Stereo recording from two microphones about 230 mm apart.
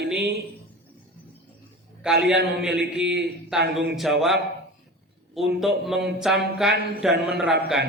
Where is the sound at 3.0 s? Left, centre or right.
Right.